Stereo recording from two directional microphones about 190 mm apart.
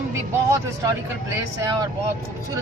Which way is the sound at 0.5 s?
20° right (ahead or behind).